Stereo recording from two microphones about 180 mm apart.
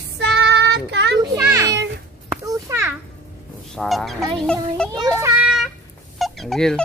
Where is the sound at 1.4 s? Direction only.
15° right (ahead or behind).